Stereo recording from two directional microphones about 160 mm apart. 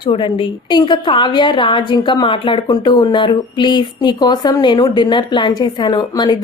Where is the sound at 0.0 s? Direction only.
30° left (ahead or behind).